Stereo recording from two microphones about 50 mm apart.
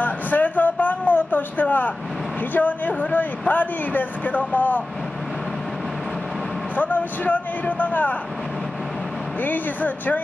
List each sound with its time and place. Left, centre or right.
0.0 s a sound: left
2.5 s speech: left
6.8 s speech: left
9.4 s speech: left